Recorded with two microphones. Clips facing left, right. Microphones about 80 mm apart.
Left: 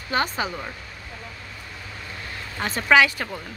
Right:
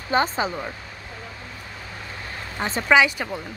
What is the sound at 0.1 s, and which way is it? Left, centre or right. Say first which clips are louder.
Speech: right 3 dB; right.